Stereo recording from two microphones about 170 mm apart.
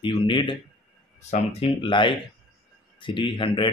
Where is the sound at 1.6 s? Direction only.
30° left (ahead or behind).